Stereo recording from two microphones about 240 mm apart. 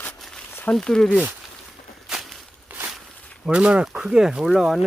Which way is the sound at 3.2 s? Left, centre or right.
Centre.